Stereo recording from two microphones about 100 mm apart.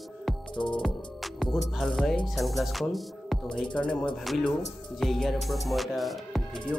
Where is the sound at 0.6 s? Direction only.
50° left (ahead or behind).